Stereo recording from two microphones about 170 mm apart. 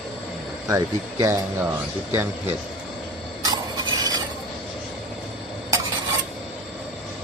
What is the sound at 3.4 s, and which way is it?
Stir, 25° right (ahead or behind).